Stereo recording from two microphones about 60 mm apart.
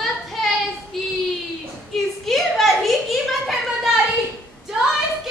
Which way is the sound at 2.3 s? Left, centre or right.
Centre.